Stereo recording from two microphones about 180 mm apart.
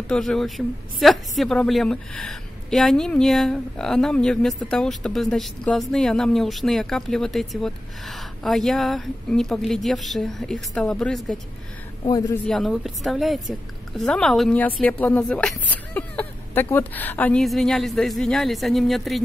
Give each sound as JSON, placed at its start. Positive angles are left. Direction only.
{"t": 0.1, "sound": "a woman's voice", "side_deg": 0}
{"t": 12.1, "sound": "a man's voice", "side_deg": 20}
{"t": 12.4, "sound": "a woman's voice", "side_deg": 0}